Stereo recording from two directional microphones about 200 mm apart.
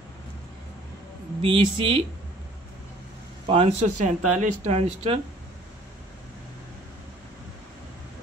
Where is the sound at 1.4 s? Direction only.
25° right (ahead or behind).